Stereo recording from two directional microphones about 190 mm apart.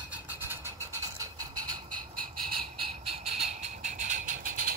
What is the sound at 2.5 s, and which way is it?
Squeal, 30° right (ahead or behind).